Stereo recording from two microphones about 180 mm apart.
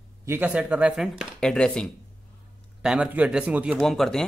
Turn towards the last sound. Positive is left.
turn(degrees=0)  # may be behind; listen again after turning